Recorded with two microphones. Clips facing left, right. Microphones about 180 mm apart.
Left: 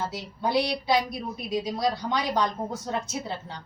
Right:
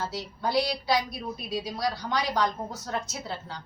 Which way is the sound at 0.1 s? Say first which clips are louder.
Left 2 dB; 20° left (ahead or behind).